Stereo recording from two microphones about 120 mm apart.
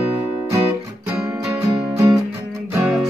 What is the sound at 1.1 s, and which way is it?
Music, 5° right (ahead or behind).